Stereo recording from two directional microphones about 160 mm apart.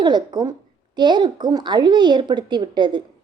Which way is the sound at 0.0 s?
25° right (ahead or behind).